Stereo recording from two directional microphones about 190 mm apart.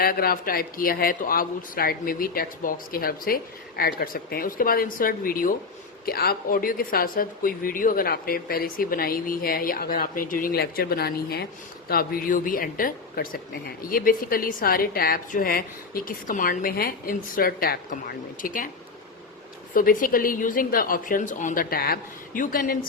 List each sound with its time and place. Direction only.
0.0 s speech: 50° left (ahead or behind)
19.7 s speech: 45° left (ahead or behind)